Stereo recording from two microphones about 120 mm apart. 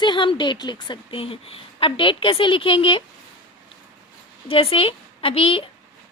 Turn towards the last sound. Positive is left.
turn(degrees=50)  # may be behind; listen again after turning